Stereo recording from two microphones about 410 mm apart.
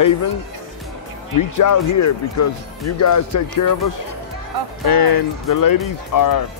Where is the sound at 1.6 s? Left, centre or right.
Left.